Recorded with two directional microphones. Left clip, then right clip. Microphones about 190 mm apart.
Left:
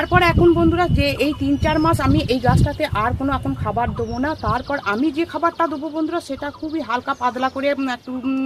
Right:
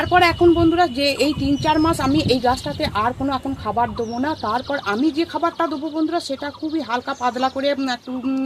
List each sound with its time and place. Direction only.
0.1 s speech: 30° right (ahead or behind)
6.7 s speech: 30° right (ahead or behind)